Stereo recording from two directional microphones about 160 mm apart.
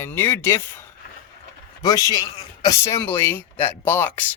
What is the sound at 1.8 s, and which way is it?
A man's voice, 20° left (ahead or behind).